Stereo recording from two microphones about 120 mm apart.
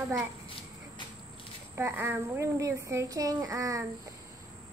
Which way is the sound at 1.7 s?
20° right (ahead or behind).